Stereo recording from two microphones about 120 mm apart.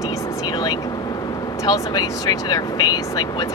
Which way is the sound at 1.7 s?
35° left (ahead or behind).